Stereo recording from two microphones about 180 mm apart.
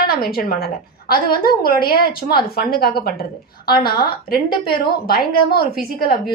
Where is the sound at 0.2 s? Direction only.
60° left (ahead or behind).